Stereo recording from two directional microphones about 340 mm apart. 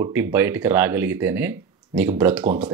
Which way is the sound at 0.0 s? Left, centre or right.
Centre.